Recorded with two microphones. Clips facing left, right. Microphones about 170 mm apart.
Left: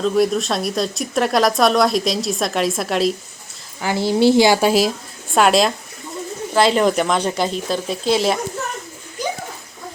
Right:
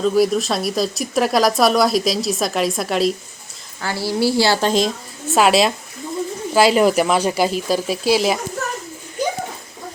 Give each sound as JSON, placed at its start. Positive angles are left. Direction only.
{"t": 0.0, "sound": "speech", "side_deg": 0}
{"t": 3.8, "sound": "a woman's voice", "side_deg": 20}
{"t": 5.3, "sound": "speech", "side_deg": 0}